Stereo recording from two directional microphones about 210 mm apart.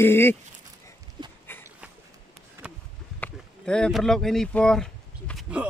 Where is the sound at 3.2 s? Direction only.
5° left (ahead or behind).